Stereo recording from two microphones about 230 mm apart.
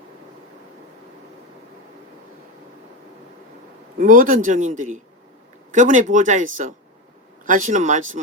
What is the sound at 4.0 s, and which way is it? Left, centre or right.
Speech, right.